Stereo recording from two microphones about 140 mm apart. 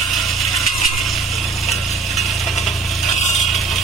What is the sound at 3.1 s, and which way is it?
Mechanisms, 55° left (ahead or behind).